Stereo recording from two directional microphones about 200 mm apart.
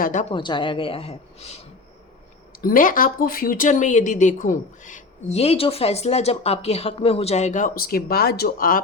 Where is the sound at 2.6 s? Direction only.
45° left (ahead or behind).